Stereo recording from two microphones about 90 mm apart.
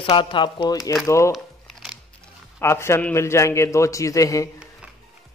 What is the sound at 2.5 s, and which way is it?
A man's voice, 30° left (ahead or behind).